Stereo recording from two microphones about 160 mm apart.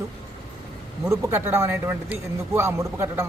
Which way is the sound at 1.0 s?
15° right (ahead or behind).